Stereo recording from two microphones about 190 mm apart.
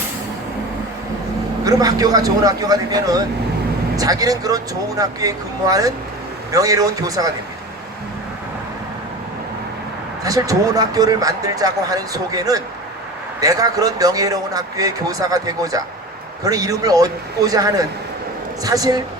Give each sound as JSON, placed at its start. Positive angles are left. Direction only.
{"t": 1.6, "sound": "a man's voice", "side_deg": -20}
{"t": 10.2, "sound": "a man's voice", "side_deg": -20}